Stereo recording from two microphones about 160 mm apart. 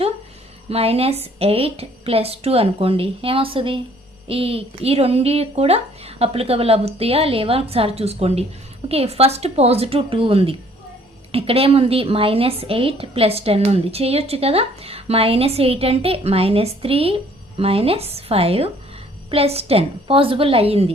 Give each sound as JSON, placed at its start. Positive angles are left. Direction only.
{"t": 0.7, "sound": "a woman's voice", "side_deg": -40}